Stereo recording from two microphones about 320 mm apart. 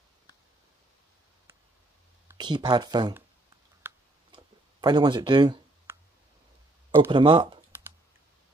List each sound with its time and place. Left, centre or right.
2.2 s speech: centre
3.8 s a sound: centre
6.9 s speech: centre